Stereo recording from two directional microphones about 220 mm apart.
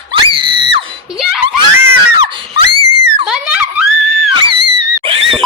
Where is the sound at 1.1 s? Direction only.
Centre (ahead or behind).